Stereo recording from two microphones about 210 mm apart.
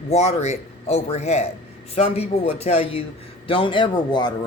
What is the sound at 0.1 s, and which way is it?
A man's voice, 30° left (ahead or behind).